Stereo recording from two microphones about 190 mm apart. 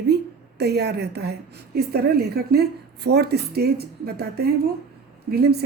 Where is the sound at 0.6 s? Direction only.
60° right (ahead or behind).